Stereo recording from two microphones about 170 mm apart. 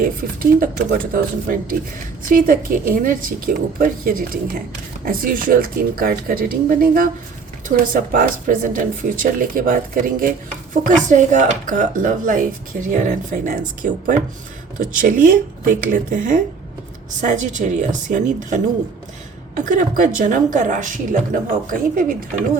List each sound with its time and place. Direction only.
0.0 s speech: 55° right (ahead or behind)